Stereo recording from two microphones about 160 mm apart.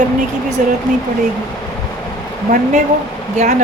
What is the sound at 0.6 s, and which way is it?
Speech, 55° right (ahead or behind).